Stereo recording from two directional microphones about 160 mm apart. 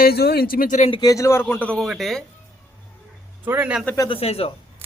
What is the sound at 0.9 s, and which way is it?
Speech, 25° left (ahead or behind).